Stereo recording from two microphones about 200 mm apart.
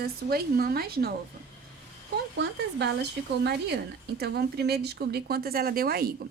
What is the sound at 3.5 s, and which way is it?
Speech, 55° right (ahead or behind).